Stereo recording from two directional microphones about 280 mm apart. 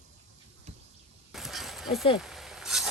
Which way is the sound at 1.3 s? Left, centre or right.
Centre.